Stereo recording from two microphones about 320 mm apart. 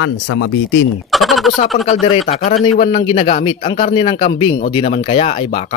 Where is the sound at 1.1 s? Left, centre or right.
Centre.